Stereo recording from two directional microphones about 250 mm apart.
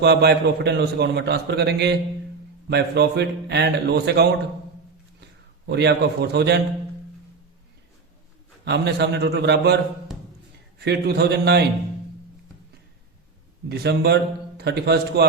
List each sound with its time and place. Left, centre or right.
0.0 s a man's voice: right
5.6 s a man's voice: right
8.6 s a man's voice: right
10.8 s a man's voice: right
13.7 s a man's voice: right